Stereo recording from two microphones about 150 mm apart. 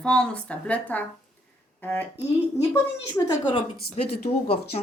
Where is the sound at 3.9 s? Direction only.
40° left (ahead or behind).